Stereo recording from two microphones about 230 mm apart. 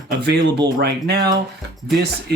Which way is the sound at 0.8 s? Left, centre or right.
Right.